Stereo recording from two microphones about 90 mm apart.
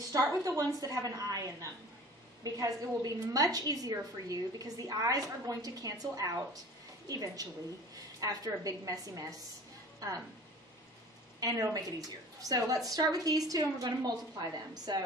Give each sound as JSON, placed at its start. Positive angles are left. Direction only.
{"t": 0.1, "sound": "a woman's voice", "side_deg": -40}
{"t": 11.3, "sound": "a woman's voice", "side_deg": -40}